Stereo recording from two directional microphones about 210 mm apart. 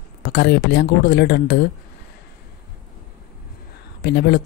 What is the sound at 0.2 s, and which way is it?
Speech, 50° left (ahead or behind).